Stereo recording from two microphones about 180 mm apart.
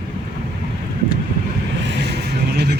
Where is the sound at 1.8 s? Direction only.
70° right (ahead or behind).